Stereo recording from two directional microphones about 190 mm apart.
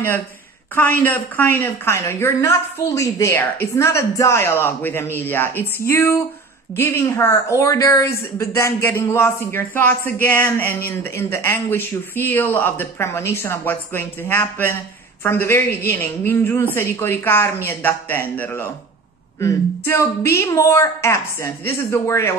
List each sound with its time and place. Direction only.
0.7 s a woman's voice: 10° left (ahead or behind)